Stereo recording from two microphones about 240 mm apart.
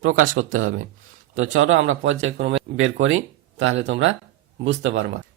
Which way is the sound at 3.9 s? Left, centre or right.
Right.